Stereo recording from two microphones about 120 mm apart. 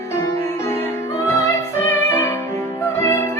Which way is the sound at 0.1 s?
25° left (ahead or behind).